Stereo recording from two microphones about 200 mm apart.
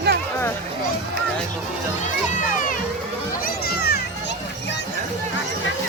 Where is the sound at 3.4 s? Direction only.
50° left (ahead or behind).